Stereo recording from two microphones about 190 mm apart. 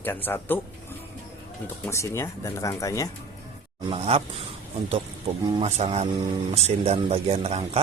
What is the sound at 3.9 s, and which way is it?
Speech, 30° right (ahead or behind).